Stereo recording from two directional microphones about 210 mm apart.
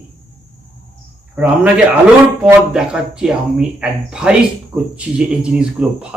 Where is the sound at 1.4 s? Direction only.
5° right (ahead or behind).